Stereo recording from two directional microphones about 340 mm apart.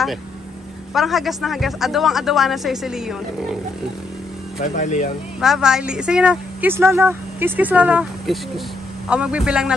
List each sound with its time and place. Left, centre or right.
0.9 s a woman's voice: centre
4.7 s speech: left
5.4 s a woman's voice: centre